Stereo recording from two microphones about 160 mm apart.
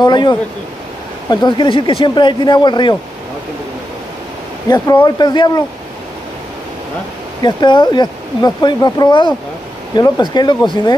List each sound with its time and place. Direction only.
0.0 s speech: 25° left (ahead or behind)
4.6 s speech: 25° left (ahead or behind)
7.4 s speech: 30° left (ahead or behind)